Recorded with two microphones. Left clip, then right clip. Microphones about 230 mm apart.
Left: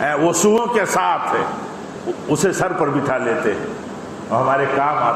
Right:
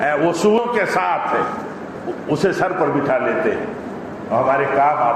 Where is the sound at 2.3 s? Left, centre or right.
Left.